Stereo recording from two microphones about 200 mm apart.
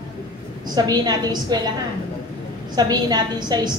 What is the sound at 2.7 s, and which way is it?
A woman's voice, 20° right (ahead or behind).